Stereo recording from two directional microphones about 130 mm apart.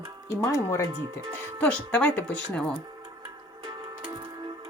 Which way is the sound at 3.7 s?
35° right (ahead or behind).